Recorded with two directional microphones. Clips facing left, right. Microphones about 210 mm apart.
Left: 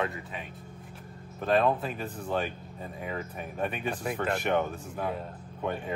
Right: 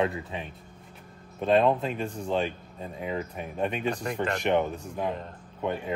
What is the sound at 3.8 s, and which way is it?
Speech, 5° left (ahead or behind).